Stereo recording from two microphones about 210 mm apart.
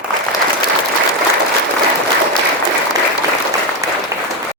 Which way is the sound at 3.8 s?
15° right (ahead or behind).